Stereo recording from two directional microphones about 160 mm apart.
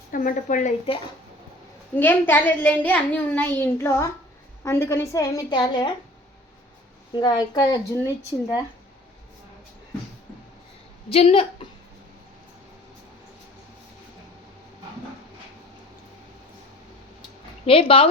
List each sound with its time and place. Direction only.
0.1 s a woman's voice: 60° left (ahead or behind)
2.0 s a child's voice: 10° left (ahead or behind); by 5.9 s 25° left (ahead or behind)
7.1 s speech: 30° left (ahead or behind)
11.1 s speech: 35° left (ahead or behind)
17.7 s speech: 35° left (ahead or behind)